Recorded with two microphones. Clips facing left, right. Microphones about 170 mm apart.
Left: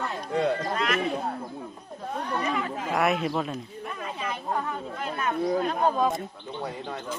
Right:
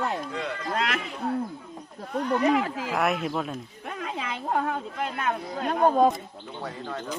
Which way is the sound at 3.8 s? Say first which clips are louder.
Right 3 dB; 70° right (ahead or behind).